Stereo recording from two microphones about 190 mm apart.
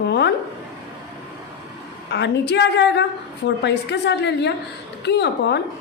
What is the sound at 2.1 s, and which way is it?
A woman's voice, 65° left (ahead or behind).